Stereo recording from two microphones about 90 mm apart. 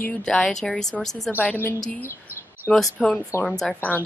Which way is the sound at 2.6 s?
10° left (ahead or behind).